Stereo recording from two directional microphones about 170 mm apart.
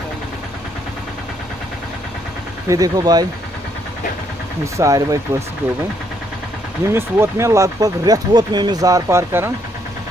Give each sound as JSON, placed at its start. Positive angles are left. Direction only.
{"t": 2.7, "sound": "speech", "side_deg": -20}
{"t": 4.7, "sound": "speech", "side_deg": -20}
{"t": 6.9, "sound": "speech", "side_deg": -15}